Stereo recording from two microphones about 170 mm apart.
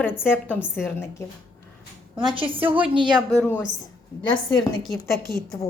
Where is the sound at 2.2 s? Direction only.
30° right (ahead or behind).